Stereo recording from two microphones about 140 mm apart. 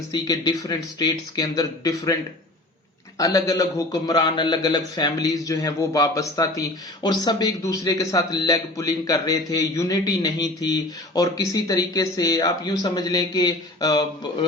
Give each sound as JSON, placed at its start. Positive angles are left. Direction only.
{"t": 0.1, "sound": "a man's voice", "side_deg": 30}
{"t": 3.2, "sound": "a man's voice", "side_deg": 25}